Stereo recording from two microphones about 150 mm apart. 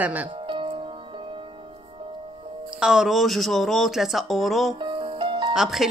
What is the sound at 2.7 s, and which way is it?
Music, 5° right (ahead or behind).